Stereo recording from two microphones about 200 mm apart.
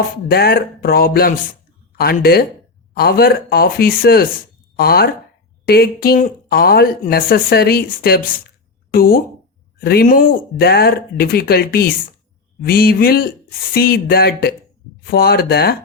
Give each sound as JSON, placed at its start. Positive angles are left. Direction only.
{"t": 0.3, "sound": "speech", "side_deg": 50}